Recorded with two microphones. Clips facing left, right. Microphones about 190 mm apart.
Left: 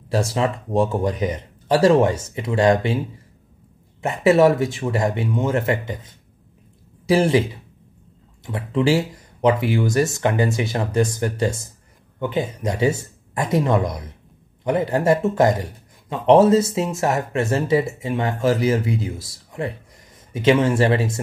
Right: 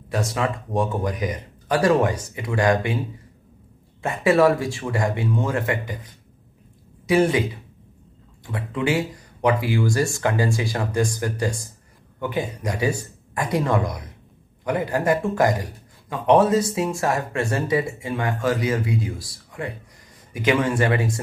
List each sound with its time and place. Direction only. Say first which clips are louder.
0.1 s speech: left 3 dB; 30° left (ahead or behind)
4.0 s speech: left 2 dB; 25° left (ahead or behind)
8.5 s speech: left 5 dB; 25° left (ahead or behind)